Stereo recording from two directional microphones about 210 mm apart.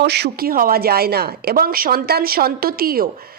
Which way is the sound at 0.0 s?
50° right (ahead or behind).